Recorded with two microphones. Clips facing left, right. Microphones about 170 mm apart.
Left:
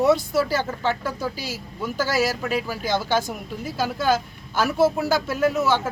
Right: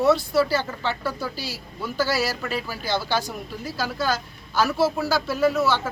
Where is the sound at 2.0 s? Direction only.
50° left (ahead or behind).